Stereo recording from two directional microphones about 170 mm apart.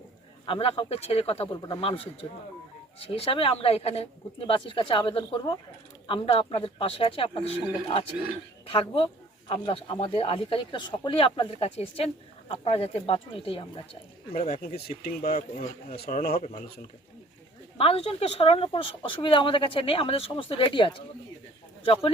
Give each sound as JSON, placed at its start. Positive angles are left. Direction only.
{"t": 0.4, "sound": "speech", "side_deg": 30}
{"t": 3.0, "sound": "speech", "side_deg": 35}
{"t": 8.6, "sound": "speech", "side_deg": 30}
{"t": 14.6, "sound": "speech", "side_deg": 65}
{"t": 15.2, "sound": "speech", "side_deg": 40}
{"t": 16.0, "sound": "speech", "side_deg": 60}
{"t": 16.3, "sound": "speech", "side_deg": 40}
{"t": 17.7, "sound": "speech", "side_deg": 35}